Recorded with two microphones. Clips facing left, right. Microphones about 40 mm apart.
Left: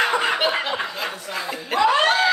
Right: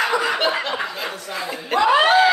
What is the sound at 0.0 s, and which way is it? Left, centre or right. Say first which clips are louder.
Snicker: even; left.